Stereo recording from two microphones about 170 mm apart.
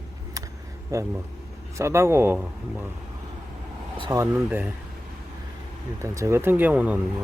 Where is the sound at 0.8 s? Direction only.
20° right (ahead or behind).